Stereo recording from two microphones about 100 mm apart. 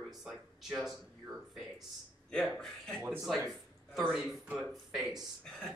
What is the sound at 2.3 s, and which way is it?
Speech, 10° left (ahead or behind).